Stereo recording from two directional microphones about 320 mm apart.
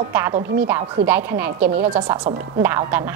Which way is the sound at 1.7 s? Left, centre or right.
Centre.